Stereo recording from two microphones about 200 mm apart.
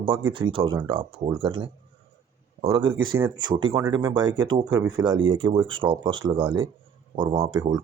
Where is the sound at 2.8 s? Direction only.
15° right (ahead or behind).